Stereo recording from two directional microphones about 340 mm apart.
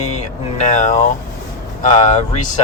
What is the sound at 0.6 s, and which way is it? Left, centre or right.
Speech, left.